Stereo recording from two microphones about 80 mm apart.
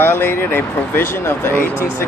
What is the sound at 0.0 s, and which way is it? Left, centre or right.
Speech, left.